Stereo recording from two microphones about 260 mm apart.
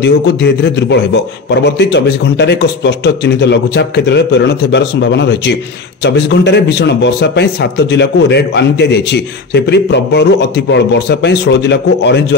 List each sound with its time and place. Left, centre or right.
0.0 s a man's voice: left